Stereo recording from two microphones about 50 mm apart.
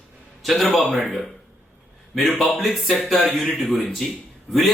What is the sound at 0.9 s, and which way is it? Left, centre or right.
Speech, centre.